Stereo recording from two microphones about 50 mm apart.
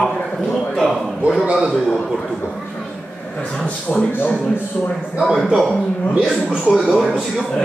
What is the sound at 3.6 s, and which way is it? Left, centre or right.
Speech, centre.